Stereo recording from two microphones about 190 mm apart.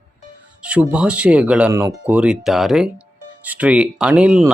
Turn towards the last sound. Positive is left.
turn(degrees=-5)  # may be behind; listen again after turning